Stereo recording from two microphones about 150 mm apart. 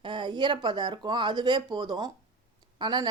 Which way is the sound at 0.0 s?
30° right (ahead or behind).